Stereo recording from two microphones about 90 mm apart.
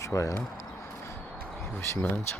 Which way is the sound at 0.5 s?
30° left (ahead or behind).